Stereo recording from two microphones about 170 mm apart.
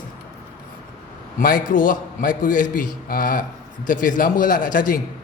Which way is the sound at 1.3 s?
55° left (ahead or behind).